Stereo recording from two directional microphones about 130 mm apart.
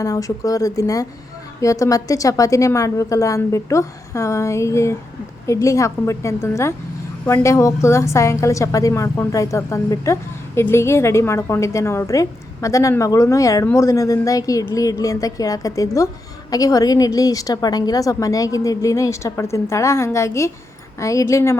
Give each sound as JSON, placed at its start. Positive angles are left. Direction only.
{"t": 0.0, "sound": "a woman's voice", "side_deg": 25}